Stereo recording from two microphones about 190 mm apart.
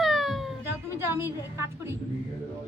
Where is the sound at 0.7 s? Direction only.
10° right (ahead or behind).